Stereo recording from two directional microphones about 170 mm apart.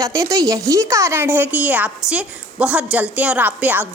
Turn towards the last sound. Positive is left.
turn(degrees=-10)  # may be behind; listen again after turning